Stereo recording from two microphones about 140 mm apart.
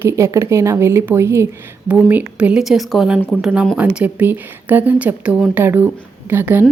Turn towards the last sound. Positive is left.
turn(degrees=-15)  # may be behind; listen again after turning